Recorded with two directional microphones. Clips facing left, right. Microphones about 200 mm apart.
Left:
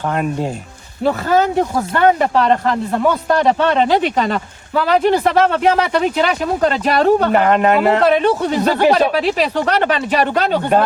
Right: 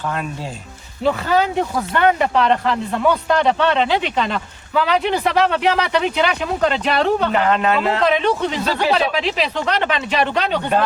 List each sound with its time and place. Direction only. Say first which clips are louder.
0.1 s speech: left 7 dB; 50° left (ahead or behind)